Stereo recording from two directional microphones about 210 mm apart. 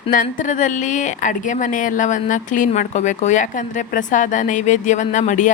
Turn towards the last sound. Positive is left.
turn(degrees=35)  # may be behind; listen again after turning